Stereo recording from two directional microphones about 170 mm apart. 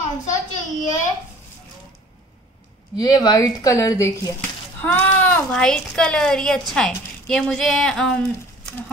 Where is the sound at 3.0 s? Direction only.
20° left (ahead or behind).